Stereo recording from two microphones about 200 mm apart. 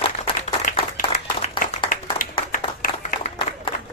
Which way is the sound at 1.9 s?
40° left (ahead or behind).